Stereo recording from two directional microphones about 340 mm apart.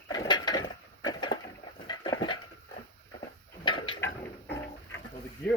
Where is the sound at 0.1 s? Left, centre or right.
Centre.